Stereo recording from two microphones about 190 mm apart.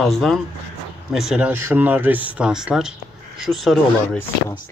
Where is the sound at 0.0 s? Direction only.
Centre (ahead or behind).